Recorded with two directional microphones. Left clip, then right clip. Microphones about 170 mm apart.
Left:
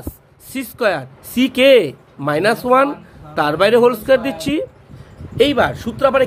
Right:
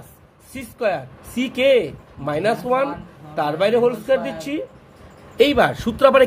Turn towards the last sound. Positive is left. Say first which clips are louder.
# right 1 dB
turn(degrees=0)  # may be behind; listen again after turning